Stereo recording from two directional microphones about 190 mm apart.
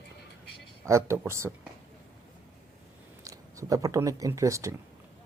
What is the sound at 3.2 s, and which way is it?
Speech, 15° right (ahead or behind).